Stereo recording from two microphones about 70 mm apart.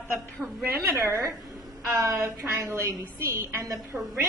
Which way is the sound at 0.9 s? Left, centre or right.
Right.